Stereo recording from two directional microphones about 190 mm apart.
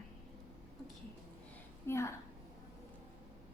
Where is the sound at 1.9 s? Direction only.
15° left (ahead or behind).